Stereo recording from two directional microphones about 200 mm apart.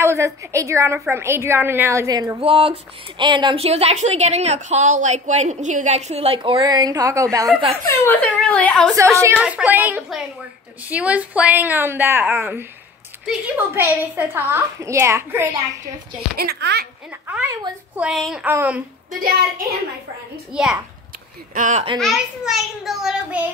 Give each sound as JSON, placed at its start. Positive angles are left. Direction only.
{"t": 0.0, "sound": "a woman's voice", "side_deg": -15}
{"t": 2.4, "sound": "a woman's voice", "side_deg": -30}
{"t": 7.8, "sound": "speech", "side_deg": 10}
{"t": 8.9, "sound": "a woman's voice", "side_deg": -15}
{"t": 16.3, "sound": "a child's voice", "side_deg": -55}
{"t": 17.3, "sound": "a woman's voice", "side_deg": -10}
{"t": 20.5, "sound": "a child's voice", "side_deg": 0}
{"t": 21.5, "sound": "a woman's voice", "side_deg": -40}
{"t": 21.9, "sound": "a child's voice", "side_deg": 0}